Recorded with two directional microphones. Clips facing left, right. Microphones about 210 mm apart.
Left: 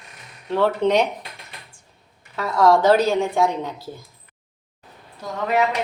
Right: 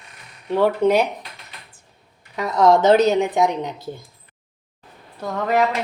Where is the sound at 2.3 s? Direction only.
15° right (ahead or behind).